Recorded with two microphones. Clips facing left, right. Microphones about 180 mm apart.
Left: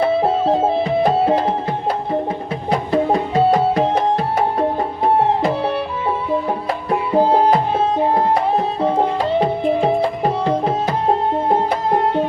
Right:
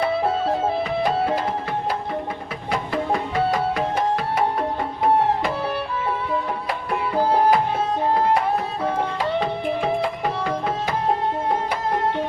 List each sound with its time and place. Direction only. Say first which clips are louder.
0.0 s music: left 5 dB; 25° left (ahead or behind)
2.6 s music: left 6 dB; 30° left (ahead or behind)
7.1 s music: left 4 dB; 25° left (ahead or behind)
9.0 s tabla: left 6 dB; 40° left (ahead or behind)
11.4 s music: left 6 dB; 35° left (ahead or behind)